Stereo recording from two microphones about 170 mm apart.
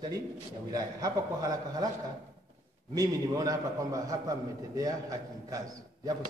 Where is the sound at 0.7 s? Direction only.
20° right (ahead or behind).